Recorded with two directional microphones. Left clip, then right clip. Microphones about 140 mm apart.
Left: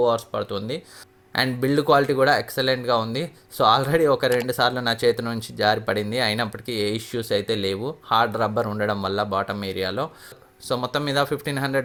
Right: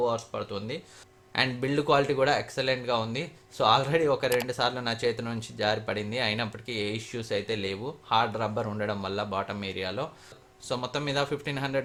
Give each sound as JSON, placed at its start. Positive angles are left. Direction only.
{"t": 0.0, "sound": "speech", "side_deg": 45}